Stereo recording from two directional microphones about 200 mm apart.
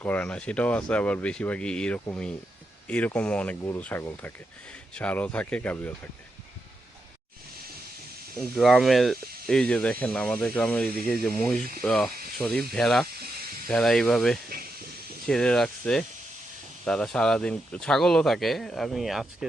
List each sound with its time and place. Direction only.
0.0 s speech: 5° left (ahead or behind)
8.4 s speech: centre (ahead or behind)
14.5 s snake: 50° right (ahead or behind)
15.3 s speech: 5° left (ahead or behind)